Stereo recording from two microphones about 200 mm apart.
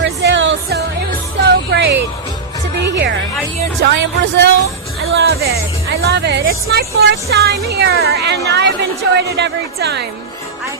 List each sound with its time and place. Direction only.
0.0 s music: 65° right (ahead or behind)
3.8 s a woman's voice: 60° right (ahead or behind)